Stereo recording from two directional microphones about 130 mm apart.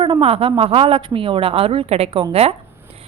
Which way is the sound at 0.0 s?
45° right (ahead or behind).